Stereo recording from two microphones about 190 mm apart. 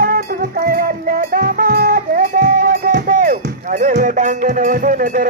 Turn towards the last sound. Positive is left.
turn(degrees=-45)  # may be behind; listen again after turning